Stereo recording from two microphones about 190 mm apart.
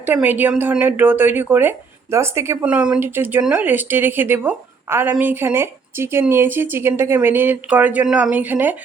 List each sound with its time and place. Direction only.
0.0 s speech: 10° right (ahead or behind)